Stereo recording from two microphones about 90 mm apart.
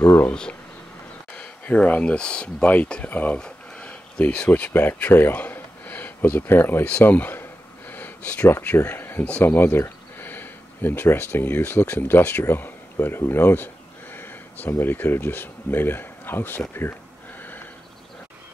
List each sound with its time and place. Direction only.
0.2 s speech: 10° left (ahead or behind)
7.9 s a sound: 15° left (ahead or behind)
8.5 s speech: 25° left (ahead or behind)